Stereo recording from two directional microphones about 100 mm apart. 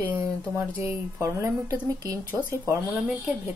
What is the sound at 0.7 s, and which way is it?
Speech, 25° right (ahead or behind).